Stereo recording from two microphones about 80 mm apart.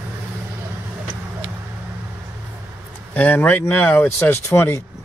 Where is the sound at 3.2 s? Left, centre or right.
Centre.